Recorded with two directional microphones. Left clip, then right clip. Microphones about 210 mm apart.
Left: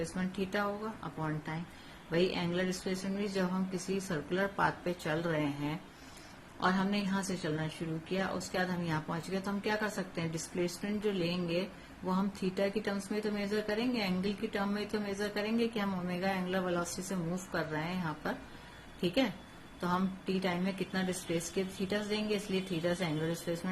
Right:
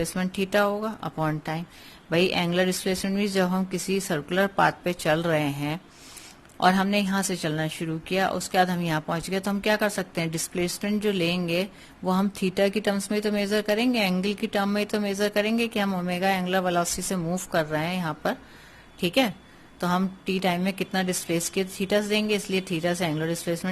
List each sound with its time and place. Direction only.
0.2 s speech: 50° right (ahead or behind)
6.6 s speech: 55° right (ahead or behind)
19.8 s speech: 50° right (ahead or behind)